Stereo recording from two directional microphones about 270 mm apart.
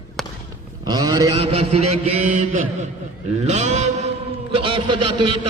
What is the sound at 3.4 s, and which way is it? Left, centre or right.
Speech, right.